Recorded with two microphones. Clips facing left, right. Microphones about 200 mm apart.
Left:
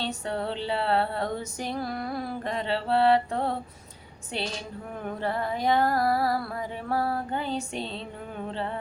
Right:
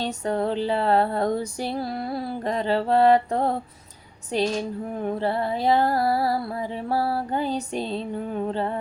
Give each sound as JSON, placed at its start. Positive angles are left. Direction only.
{"t": 0.0, "sound": "music", "side_deg": -40}
{"t": 5.0, "sound": "music", "side_deg": -30}